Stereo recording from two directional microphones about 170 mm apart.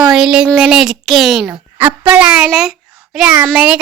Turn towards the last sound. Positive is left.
turn(degrees=-10)  # may be behind; listen again after turning